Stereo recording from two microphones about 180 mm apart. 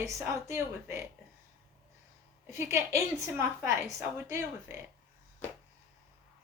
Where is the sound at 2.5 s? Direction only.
15° right (ahead or behind).